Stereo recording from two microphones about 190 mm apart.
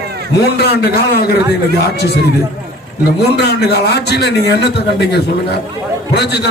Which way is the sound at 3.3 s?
60° left (ahead or behind).